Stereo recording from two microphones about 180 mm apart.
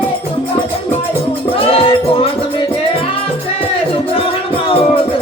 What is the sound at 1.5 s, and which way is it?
Music, 30° left (ahead or behind).